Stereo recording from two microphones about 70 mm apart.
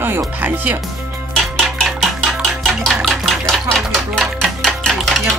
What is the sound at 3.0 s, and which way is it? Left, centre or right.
Bathtub, centre.